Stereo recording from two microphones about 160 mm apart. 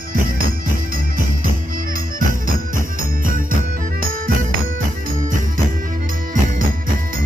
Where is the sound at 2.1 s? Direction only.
60° right (ahead or behind).